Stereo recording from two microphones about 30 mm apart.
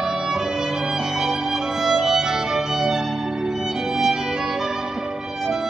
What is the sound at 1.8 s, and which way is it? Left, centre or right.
Violin, centre.